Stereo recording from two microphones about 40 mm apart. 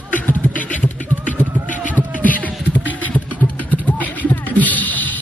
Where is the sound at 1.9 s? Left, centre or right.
Left.